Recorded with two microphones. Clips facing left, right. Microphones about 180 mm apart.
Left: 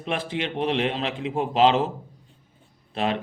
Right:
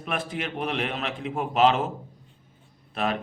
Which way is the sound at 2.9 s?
30° left (ahead or behind).